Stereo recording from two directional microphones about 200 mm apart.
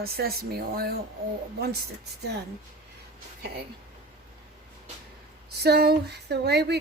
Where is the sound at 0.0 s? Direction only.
50° right (ahead or behind).